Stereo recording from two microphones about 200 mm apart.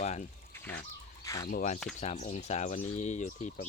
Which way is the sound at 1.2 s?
15° left (ahead or behind).